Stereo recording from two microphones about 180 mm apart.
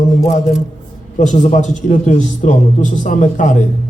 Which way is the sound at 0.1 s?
40° left (ahead or behind).